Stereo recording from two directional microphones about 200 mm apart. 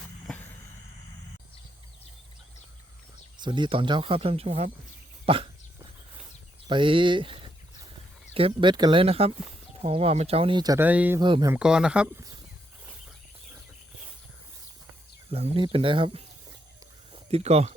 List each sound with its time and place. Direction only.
3.4 s speech: 25° right (ahead or behind)
5.2 s dog: 25° right (ahead or behind)
6.7 s speech: 25° right (ahead or behind); by 11.2 s 10° right (ahead or behind)
11.2 s speech: 20° right (ahead or behind)
11.5 s speech: 5° right (ahead or behind)
15.3 s speech: 30° right (ahead or behind)